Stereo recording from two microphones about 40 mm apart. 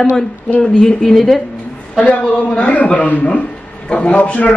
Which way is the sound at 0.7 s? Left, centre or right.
Centre.